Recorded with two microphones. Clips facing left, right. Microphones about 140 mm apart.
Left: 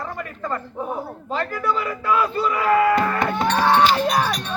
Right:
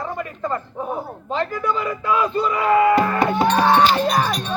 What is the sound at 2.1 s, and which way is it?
Speech, 15° right (ahead or behind).